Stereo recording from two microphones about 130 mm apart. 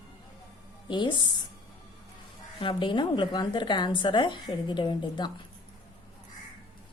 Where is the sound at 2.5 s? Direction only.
40° left (ahead or behind).